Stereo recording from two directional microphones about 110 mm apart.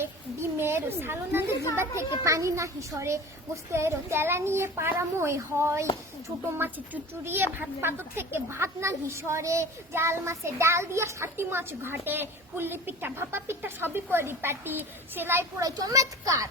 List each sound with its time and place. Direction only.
0.6 s a woman's voice: 20° right (ahead or behind)